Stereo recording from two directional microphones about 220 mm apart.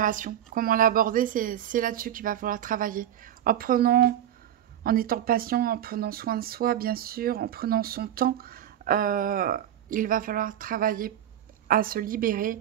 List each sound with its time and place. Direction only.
0.0 s speech: 35° right (ahead or behind)